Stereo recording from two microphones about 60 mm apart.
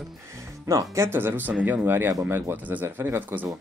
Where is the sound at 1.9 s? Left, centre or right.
Right.